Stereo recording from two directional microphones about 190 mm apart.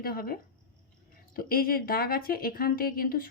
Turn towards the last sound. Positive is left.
turn(degrees=50)  # may be behind; listen again after turning